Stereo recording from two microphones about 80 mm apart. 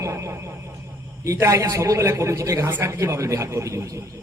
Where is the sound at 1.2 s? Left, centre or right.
Right.